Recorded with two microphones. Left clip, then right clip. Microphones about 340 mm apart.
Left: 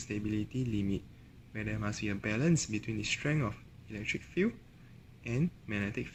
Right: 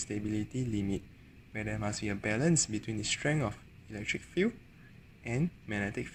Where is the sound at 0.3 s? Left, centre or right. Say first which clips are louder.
Left 1 dB; right.